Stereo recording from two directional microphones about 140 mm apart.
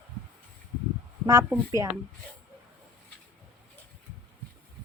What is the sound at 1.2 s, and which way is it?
Speech, 20° right (ahead or behind).